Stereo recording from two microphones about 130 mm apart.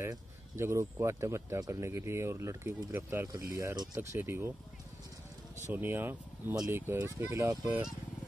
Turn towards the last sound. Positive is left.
turn(degrees=-5)  # may be behind; listen again after turning